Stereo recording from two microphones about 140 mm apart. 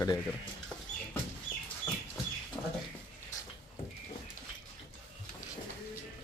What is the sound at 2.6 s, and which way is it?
Rodents, 15° left (ahead or behind).